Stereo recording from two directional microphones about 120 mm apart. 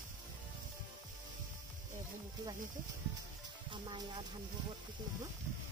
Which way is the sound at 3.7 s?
40° right (ahead or behind).